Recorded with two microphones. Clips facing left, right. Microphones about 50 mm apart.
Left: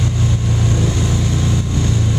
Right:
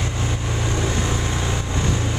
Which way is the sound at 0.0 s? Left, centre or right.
Right.